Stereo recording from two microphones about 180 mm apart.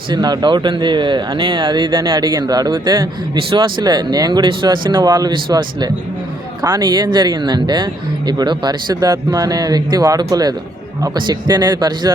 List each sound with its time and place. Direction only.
0.1 s speech: 25° right (ahead or behind)